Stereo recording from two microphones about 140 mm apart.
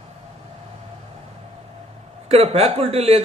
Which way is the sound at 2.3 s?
50° right (ahead or behind).